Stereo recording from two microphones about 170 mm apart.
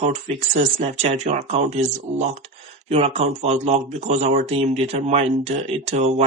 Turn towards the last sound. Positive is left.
turn(degrees=-40)  # may be behind; listen again after turning